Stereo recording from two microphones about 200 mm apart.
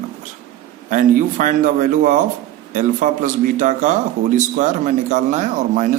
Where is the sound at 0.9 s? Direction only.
40° right (ahead or behind).